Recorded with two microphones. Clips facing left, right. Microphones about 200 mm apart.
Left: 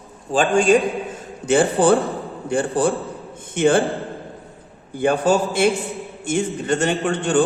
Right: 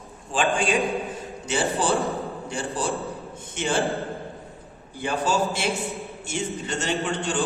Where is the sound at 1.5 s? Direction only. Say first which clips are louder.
Left 9 dB; 55° left (ahead or behind).